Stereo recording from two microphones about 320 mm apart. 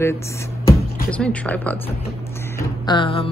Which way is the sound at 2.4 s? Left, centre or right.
Centre.